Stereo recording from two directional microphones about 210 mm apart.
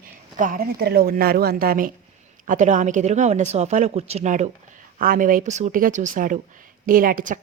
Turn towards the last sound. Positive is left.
turn(degrees=-40)  # may be behind; listen again after turning